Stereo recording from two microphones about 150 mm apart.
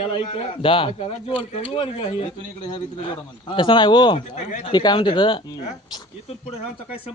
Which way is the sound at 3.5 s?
30° left (ahead or behind).